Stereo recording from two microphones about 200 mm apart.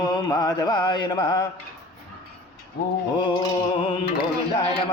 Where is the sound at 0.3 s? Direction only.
20° left (ahead or behind).